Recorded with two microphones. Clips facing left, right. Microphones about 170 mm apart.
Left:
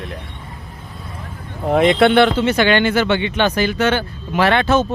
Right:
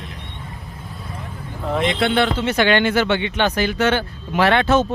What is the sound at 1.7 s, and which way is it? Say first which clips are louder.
Speech: left 7 dB; 60° left (ahead or behind).